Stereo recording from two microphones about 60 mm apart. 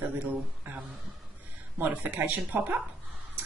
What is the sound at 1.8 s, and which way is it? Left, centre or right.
Speech, right.